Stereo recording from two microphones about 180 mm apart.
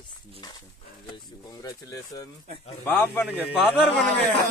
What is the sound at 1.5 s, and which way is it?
A man's voice, 20° left (ahead or behind).